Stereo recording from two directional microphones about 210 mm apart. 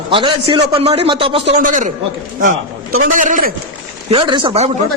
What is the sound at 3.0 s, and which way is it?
Speech, 40° right (ahead or behind).